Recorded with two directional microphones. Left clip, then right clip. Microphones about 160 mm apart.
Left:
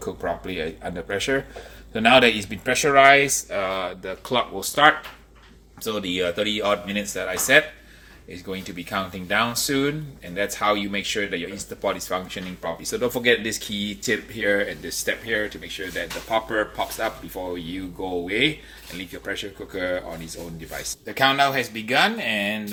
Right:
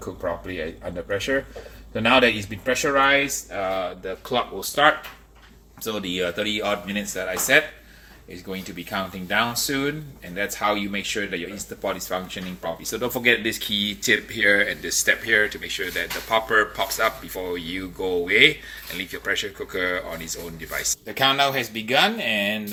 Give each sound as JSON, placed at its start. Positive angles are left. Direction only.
{"t": 1.0, "sound": "speech", "side_deg": 50}
{"t": 4.3, "sound": "speech", "side_deg": 20}
{"t": 21.1, "sound": "speech", "side_deg": 0}